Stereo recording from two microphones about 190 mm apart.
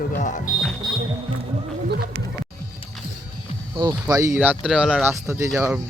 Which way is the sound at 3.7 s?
20° right (ahead or behind).